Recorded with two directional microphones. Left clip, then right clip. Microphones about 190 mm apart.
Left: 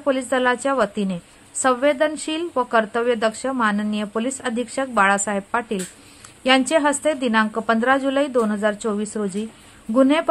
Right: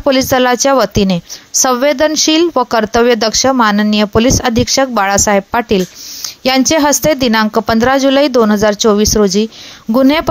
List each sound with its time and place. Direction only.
0.0 s a woman's voice: 35° right (ahead or behind)